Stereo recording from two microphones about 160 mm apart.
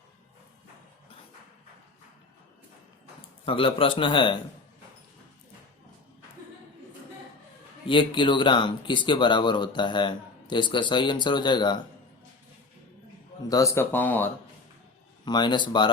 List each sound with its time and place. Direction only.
3.4 s a man's voice: 35° left (ahead or behind)
7.9 s speech: 30° left (ahead or behind)
13.5 s speech: 20° left (ahead or behind)
15.2 s speech: 25° left (ahead or behind)